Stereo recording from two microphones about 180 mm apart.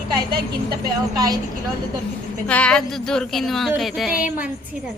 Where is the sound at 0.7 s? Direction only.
20° right (ahead or behind).